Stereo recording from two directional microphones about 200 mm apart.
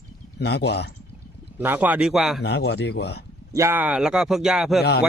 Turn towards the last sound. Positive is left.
turn(degrees=0)  # may be behind; listen again after turning